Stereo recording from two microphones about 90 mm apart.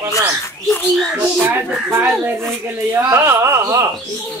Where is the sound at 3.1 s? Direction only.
35° right (ahead or behind).